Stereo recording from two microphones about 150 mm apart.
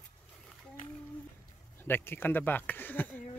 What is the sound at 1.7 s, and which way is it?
Speech, 15° left (ahead or behind).